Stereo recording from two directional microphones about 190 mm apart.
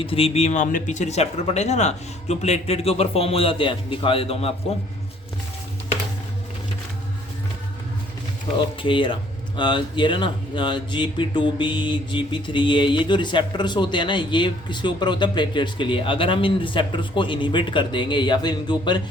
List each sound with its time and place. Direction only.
0.0 s speech: 30° left (ahead or behind)
8.5 s speech: 25° left (ahead or behind)